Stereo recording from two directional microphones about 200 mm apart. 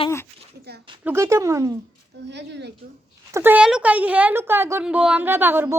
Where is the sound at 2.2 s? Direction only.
60° right (ahead or behind).